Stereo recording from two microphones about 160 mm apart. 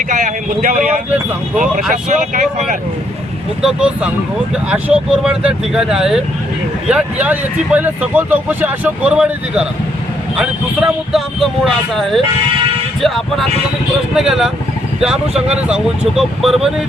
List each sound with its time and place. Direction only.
0.1 s speech: 50° right (ahead or behind)
3.6 s speech: 5° right (ahead or behind)